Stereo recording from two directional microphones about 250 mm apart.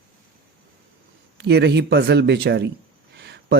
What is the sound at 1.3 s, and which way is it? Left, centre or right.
Speech, right.